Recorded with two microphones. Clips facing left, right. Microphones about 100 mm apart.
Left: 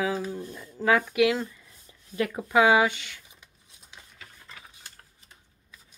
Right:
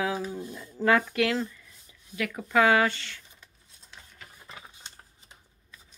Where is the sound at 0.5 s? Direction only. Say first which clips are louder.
Even; centre (ahead or behind).